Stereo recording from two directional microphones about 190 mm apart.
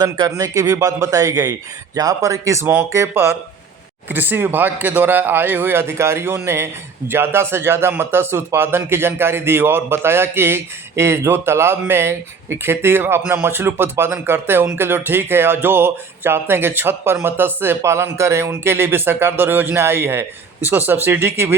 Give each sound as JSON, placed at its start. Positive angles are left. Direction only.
{"t": 0.0, "sound": "speech", "side_deg": -20}